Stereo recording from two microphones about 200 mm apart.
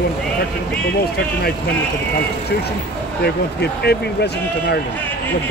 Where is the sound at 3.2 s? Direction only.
55° left (ahead or behind).